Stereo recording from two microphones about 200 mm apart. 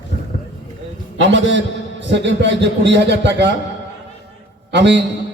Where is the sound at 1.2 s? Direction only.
65° right (ahead or behind).